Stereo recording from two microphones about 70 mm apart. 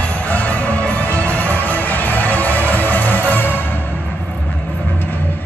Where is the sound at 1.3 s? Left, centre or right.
Left.